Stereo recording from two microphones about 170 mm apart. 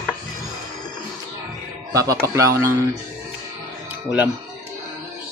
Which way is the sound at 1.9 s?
20° right (ahead or behind).